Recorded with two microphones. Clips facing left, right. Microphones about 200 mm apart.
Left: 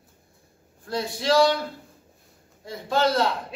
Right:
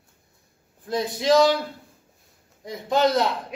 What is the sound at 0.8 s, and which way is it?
Speech, 20° right (ahead or behind).